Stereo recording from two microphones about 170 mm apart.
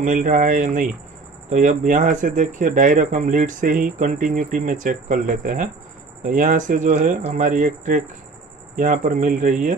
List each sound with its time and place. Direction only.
0.0 s speech: 50° right (ahead or behind)